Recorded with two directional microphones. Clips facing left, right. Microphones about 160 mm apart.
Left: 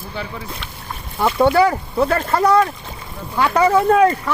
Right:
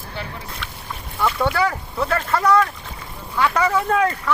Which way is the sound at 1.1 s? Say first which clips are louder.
Left 6 dB; 30° left (ahead or behind).